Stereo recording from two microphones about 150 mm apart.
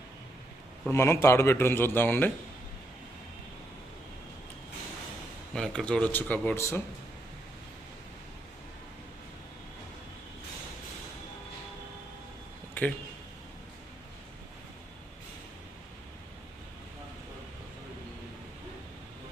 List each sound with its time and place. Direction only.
0.9 s a man's voice: 20° left (ahead or behind)
5.5 s a man's voice: 5° left (ahead or behind)
12.8 s speech: 10° left (ahead or behind)